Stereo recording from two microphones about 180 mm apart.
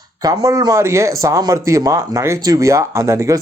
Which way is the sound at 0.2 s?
20° right (ahead or behind).